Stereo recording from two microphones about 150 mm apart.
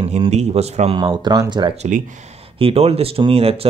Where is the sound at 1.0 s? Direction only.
25° right (ahead or behind).